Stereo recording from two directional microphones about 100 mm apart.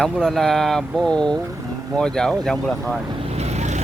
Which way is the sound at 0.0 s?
5° left (ahead or behind).